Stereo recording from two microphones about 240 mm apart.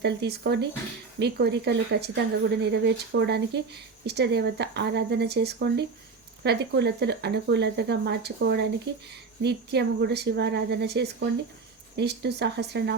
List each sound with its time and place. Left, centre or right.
0.0 s speech: right